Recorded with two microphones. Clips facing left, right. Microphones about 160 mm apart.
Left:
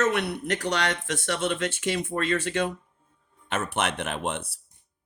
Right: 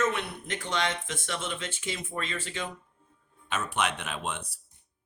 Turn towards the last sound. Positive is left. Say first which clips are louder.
# left 5 dB
turn(degrees=55)  # may be behind; listen again after turning